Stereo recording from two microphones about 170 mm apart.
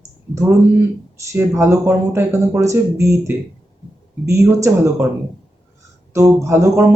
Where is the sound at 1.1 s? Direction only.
15° right (ahead or behind).